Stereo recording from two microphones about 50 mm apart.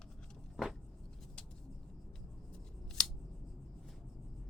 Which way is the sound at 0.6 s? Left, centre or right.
Centre.